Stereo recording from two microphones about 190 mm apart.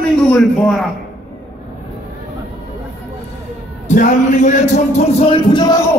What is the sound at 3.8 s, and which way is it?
A man's voice, 40° left (ahead or behind).